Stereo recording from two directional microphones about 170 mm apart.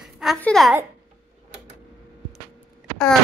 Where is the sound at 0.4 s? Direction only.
5° left (ahead or behind).